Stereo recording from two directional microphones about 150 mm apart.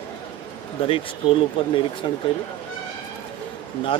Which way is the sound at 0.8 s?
40° left (ahead or behind).